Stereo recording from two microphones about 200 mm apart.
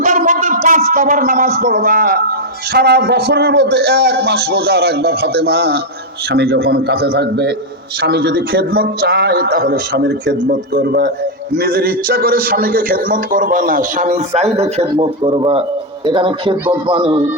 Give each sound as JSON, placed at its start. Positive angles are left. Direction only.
{"t": 0.0, "sound": "a man's voice", "side_deg": -35}